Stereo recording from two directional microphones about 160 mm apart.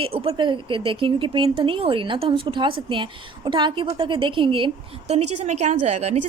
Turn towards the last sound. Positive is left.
turn(degrees=-45)  # may be behind; listen again after turning